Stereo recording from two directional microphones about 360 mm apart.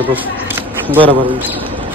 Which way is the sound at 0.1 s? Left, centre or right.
Centre.